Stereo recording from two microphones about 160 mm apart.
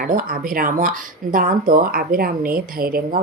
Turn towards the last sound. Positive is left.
turn(degrees=-65)  # may be behind; listen again after turning